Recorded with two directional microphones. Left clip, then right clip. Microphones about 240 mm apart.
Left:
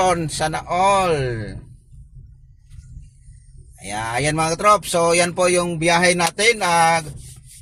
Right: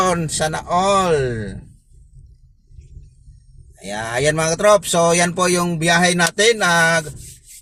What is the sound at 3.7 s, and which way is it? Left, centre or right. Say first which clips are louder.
Speech: right 1 dB; centre.